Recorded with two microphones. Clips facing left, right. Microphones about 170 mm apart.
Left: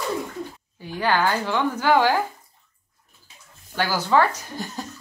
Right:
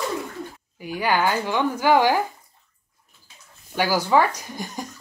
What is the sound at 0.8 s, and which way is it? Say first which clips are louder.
Speech: even; 10° right (ahead or behind).